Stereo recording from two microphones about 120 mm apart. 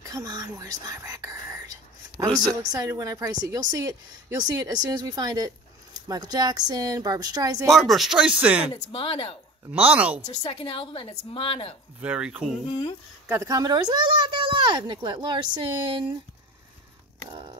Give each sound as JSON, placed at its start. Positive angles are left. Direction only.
{"t": 0.0, "sound": "whispering", "side_deg": -30}
{"t": 2.9, "sound": "a woman's voice", "side_deg": -30}
{"t": 7.7, "sound": "speech", "side_deg": 0}
{"t": 8.9, "sound": "a woman's voice", "side_deg": 50}
{"t": 9.7, "sound": "speech", "side_deg": -15}
{"t": 10.5, "sound": "a woman's voice", "side_deg": 45}
{"t": 12.0, "sound": "speech", "side_deg": -10}
{"t": 12.6, "sound": "speech", "side_deg": 30}
{"t": 13.3, "sound": "speech", "side_deg": -30}
{"t": 17.3, "sound": "a sound", "side_deg": -45}